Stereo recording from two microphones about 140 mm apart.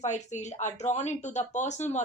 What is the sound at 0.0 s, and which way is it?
Speech, 55° left (ahead or behind).